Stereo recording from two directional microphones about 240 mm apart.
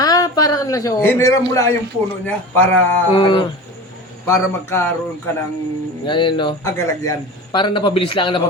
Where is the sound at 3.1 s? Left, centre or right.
Centre.